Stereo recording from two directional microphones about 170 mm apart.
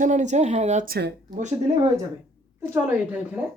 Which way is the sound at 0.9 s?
75° right (ahead or behind).